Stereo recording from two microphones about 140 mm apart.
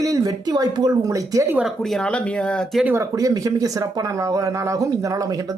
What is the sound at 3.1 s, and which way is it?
Speech, 25° right (ahead or behind).